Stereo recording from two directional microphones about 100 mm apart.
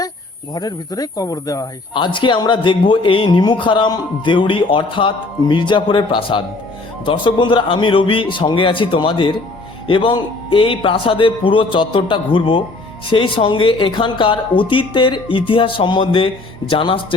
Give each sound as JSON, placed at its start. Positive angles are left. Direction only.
{"t": 0.5, "sound": "speech", "side_deg": 40}
{"t": 1.9, "sound": "speech", "side_deg": 55}